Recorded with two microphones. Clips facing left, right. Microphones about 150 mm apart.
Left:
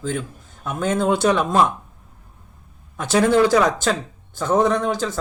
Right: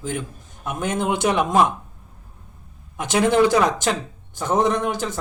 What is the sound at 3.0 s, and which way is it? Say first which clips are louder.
Speech: left 1 dB; 20° right (ahead or behind).